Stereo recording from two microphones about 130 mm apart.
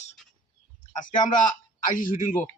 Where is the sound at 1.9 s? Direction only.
90° left.